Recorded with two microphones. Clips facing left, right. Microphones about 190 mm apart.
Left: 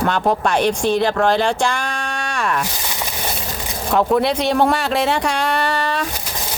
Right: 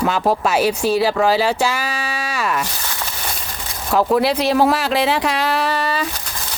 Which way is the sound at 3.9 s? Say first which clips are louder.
Even; centre (ahead or behind).